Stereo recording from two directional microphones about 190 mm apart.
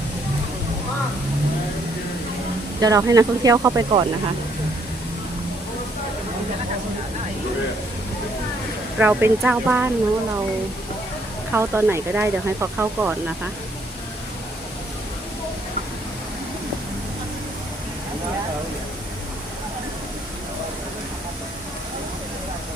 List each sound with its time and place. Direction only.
2.8 s speech: 15° right (ahead or behind)
9.0 s speech: 10° right (ahead or behind)
11.5 s speech: 10° right (ahead or behind)